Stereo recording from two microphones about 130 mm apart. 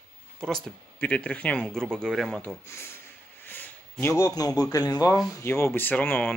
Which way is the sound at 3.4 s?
15° left (ahead or behind).